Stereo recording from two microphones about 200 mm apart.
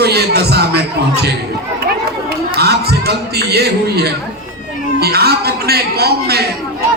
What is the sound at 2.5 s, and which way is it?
A man's voice, 55° right (ahead or behind).